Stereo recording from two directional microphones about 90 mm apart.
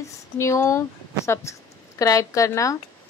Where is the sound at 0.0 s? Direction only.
30° left (ahead or behind).